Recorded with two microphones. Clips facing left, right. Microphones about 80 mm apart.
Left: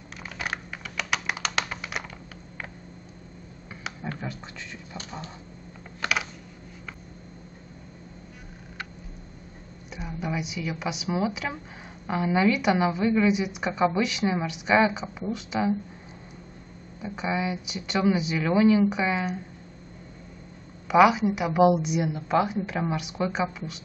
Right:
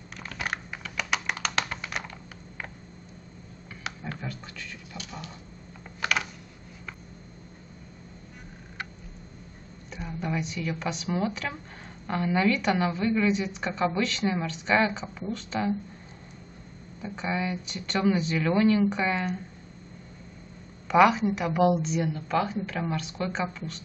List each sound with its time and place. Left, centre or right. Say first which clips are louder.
0.2 s typing: even; centre
4.2 s a sound: left 2 dB; centre
4.9 s a sound: left 3 dB; left
5.9 s computer keyboard: even; centre
9.8 s a woman's voice: left 1 dB; centre
17.0 s a woman's voice: left 2 dB; centre
20.9 s a woman's voice: left 2 dB; centre